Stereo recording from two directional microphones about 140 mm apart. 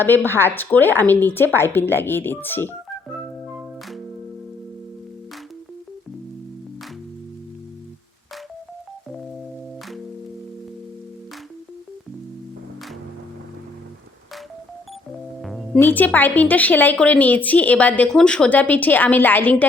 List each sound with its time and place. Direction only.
0.0 s a woman's voice: 15° left (ahead or behind)
15.4 s music: centre (ahead or behind)
15.8 s a woman's voice: 10° left (ahead or behind)